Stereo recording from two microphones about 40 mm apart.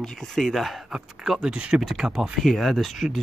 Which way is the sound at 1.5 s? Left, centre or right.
Right.